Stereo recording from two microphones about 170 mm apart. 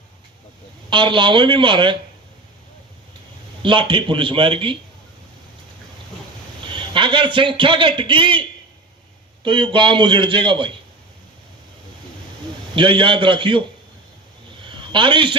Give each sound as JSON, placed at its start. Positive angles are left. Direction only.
{"t": 0.9, "sound": "a man's voice", "side_deg": -30}
{"t": 3.6, "sound": "a man's voice", "side_deg": -30}
{"t": 6.7, "sound": "a man's voice", "side_deg": -30}
{"t": 12.7, "sound": "a man's voice", "side_deg": -30}
{"t": 14.7, "sound": "speech", "side_deg": -30}